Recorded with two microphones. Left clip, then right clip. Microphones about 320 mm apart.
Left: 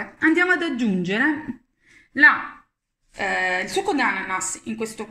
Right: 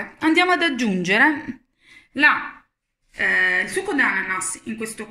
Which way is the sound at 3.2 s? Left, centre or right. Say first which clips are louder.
Right 4 dB; centre.